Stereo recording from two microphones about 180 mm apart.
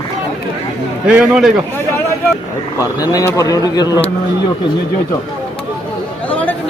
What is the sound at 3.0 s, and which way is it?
Speech, 20° left (ahead or behind).